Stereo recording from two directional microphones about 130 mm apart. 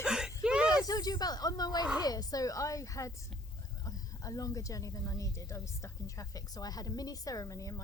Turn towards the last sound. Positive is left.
turn(degrees=25)  # may be behind; listen again after turning